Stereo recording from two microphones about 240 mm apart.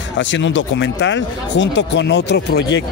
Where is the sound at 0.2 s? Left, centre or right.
Left.